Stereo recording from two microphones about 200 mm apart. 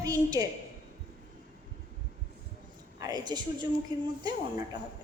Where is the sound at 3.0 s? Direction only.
20° right (ahead or behind).